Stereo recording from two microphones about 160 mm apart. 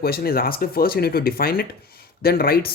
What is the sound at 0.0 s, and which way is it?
Speech, 70° left (ahead or behind).